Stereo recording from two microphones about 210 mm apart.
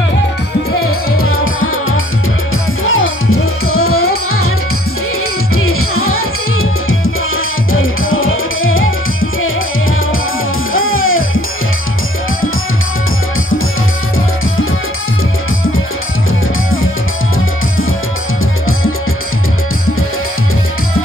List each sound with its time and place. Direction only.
1.1 s music: 75° left (ahead or behind)
5.6 s music: 90° left; by 9.5 s 70° left (ahead or behind)
10.7 s music: 75° left (ahead or behind)